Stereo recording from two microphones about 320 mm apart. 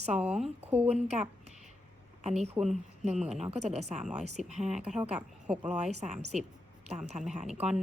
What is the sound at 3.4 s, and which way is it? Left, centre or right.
Speech, centre.